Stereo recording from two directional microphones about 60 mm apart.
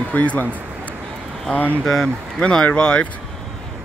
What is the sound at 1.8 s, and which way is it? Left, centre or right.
Speech, centre.